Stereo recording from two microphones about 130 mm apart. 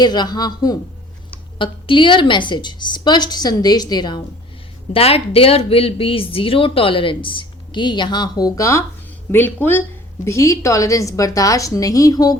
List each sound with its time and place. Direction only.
0.0 s a woman's voice: 35° left (ahead or behind)
4.9 s a woman's voice: 50° left (ahead or behind); by 12.4 s 30° left (ahead or behind)